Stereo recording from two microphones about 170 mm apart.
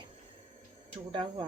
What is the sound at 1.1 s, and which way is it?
Speech, 30° right (ahead or behind).